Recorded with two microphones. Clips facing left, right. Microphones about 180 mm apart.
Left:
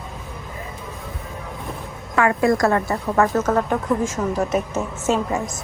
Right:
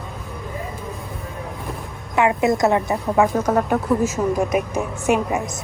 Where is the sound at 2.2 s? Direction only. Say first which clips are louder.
Even; 20° right (ahead or behind).